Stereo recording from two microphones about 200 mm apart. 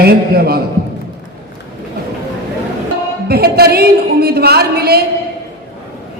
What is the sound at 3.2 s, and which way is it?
A woman's voice, 50° right (ahead or behind).